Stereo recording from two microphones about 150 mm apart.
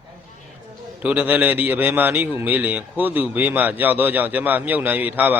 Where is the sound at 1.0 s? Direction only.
10° right (ahead or behind).